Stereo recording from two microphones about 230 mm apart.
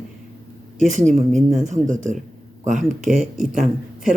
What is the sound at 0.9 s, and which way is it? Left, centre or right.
Speech, right.